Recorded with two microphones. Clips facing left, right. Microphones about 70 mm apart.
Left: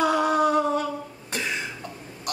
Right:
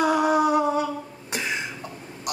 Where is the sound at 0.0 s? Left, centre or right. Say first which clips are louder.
Right 1 dB; centre.